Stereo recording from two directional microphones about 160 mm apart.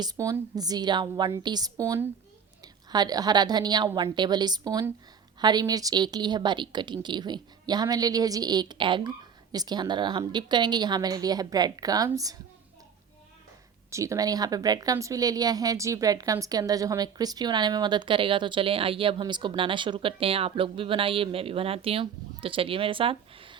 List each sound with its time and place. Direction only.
0.0 s speech: 20° right (ahead or behind)
13.9 s speech: 20° right (ahead or behind)